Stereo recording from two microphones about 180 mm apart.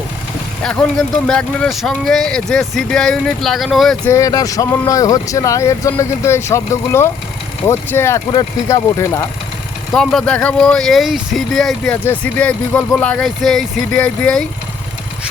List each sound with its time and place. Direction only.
0.6 s speech: 5° left (ahead or behind)
4.1 s speech: 20° left (ahead or behind)
9.9 s speech: centre (ahead or behind)